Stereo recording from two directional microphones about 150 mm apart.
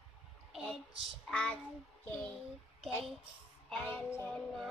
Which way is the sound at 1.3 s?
5° left (ahead or behind).